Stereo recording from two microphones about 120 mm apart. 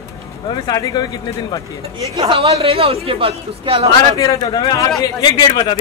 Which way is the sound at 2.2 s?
55° right (ahead or behind).